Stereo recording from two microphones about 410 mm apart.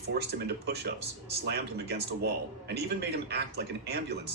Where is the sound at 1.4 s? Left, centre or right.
Right.